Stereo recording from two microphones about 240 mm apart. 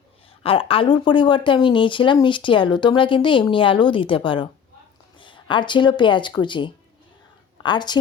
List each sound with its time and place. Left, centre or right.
0.3 s speech: left